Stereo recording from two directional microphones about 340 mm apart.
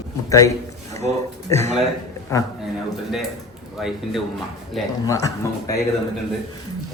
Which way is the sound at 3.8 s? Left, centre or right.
Centre.